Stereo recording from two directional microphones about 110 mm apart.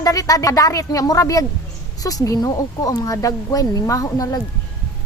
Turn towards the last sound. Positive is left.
turn(degrees=35)  # may be behind; listen again after turning